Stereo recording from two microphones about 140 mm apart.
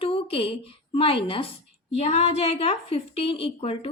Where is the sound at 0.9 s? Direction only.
40° left (ahead or behind).